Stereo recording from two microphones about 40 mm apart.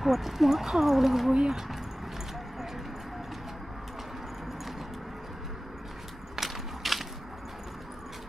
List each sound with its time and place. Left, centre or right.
0.0 s speech: centre
1.3 s speech: right
6.3 s a sound: centre